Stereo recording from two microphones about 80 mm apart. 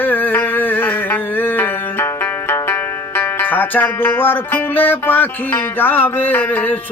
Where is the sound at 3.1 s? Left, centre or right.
Left.